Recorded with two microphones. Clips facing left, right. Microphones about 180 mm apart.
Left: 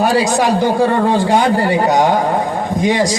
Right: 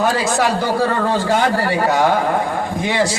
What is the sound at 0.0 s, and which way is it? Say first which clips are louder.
A man's voice: left 3 dB; 15° left (ahead or behind).